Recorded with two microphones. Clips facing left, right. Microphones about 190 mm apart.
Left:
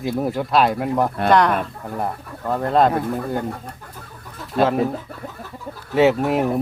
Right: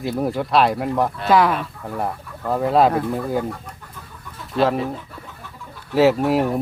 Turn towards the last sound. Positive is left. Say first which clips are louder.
# right 1 dB
turn(degrees=0)  # may be behind; listen again after turning